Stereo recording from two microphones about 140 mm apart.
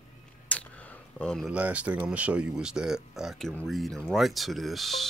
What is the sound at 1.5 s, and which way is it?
Speech, 10° right (ahead or behind).